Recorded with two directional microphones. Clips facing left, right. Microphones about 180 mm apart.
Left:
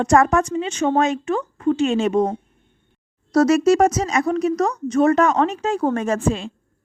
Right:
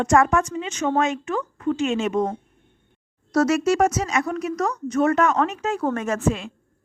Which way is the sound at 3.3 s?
35° left (ahead or behind).